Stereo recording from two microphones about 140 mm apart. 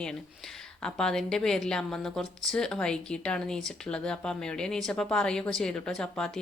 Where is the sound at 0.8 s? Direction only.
5° left (ahead or behind).